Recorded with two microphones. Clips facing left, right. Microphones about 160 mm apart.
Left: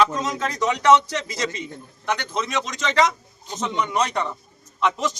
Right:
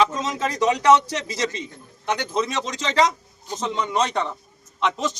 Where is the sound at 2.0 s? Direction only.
30° right (ahead or behind).